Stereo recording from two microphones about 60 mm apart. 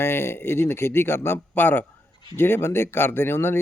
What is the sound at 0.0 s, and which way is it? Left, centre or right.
A man's voice, left.